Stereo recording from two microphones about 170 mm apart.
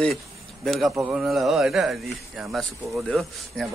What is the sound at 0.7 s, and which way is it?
Speech, centre (ahead or behind).